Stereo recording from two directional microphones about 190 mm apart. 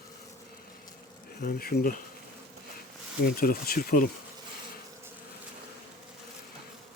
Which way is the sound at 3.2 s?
50° left (ahead or behind).